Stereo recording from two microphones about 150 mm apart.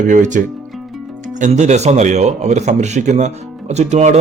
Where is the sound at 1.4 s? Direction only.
50° right (ahead or behind).